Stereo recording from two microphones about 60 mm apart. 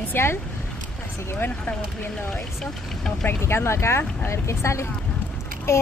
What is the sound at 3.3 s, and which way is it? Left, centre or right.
Speech, left.